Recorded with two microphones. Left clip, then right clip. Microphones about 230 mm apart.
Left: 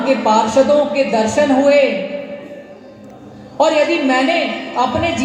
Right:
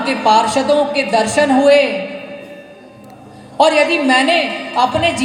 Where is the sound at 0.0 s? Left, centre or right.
Right.